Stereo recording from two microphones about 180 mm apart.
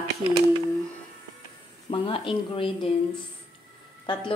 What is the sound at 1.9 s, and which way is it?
A woman's voice, 30° left (ahead or behind).